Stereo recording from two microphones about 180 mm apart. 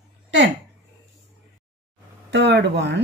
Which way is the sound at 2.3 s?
70° right (ahead or behind).